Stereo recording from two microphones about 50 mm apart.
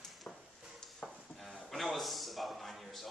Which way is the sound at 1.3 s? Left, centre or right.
Centre.